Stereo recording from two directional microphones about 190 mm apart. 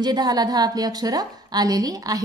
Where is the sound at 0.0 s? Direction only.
20° right (ahead or behind).